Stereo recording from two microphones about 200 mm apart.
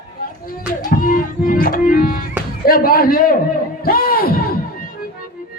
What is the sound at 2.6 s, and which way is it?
Speech, 45° left (ahead or behind).